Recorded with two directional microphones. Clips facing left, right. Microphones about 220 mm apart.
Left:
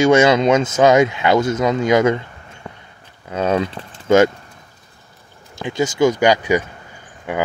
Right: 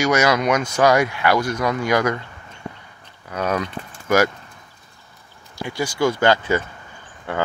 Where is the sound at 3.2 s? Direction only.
25° left (ahead or behind).